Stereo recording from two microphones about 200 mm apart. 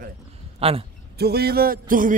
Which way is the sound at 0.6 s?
30° right (ahead or behind).